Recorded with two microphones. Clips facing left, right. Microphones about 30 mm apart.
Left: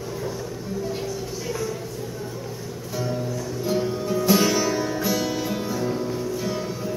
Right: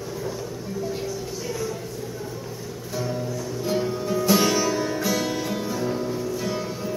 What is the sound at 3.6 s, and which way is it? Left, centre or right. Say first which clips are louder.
Music: left 1 dB; centre.